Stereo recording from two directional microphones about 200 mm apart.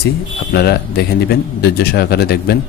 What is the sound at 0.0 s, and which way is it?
Speech, 50° left (ahead or behind).